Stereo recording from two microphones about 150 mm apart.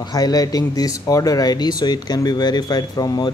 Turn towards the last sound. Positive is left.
turn(degrees=25)  # may be behind; listen again after turning